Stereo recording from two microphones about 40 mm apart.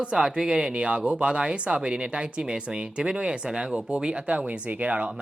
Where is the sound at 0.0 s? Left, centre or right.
Right.